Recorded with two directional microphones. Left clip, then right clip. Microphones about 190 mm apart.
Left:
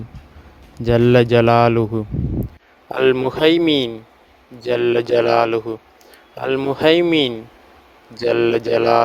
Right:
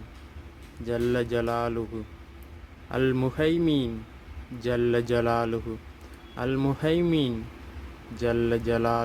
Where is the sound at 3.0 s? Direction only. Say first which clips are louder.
Left 11 dB; 45° left (ahead or behind).